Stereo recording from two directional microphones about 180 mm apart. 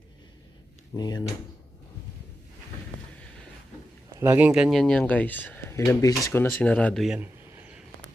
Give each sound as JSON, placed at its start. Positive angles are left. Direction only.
{"t": 0.9, "sound": "speech", "side_deg": 25}
{"t": 4.2, "sound": "speech", "side_deg": -10}
{"t": 7.5, "sound": "a sound", "side_deg": -10}